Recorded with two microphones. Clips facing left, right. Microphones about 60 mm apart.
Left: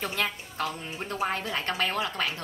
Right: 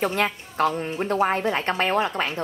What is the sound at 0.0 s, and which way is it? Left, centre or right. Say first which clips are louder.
A woman's voice: right 7 dB; right.